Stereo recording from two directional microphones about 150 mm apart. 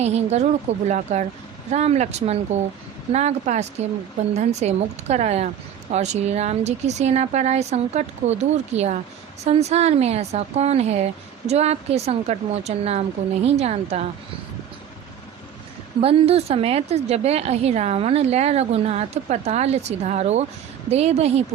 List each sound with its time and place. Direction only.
0.0 s speech: 45° right (ahead or behind)
16.0 s speech: 40° right (ahead or behind)